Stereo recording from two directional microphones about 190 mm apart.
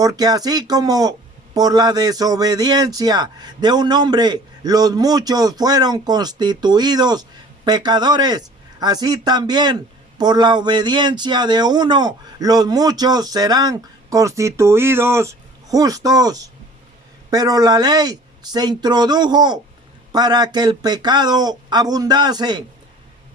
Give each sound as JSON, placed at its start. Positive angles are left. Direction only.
{"t": 0.0, "sound": "a man's voice", "side_deg": -20}